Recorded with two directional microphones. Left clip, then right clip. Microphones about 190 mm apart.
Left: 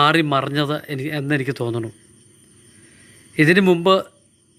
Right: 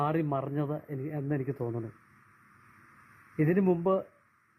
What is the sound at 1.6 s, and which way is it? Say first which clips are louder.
Speech: left 11 dB; 20° left (ahead or behind).